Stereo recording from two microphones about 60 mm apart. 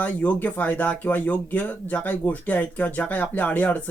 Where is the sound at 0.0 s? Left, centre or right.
Left.